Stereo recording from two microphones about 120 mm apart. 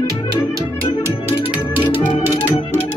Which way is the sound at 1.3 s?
15° right (ahead or behind).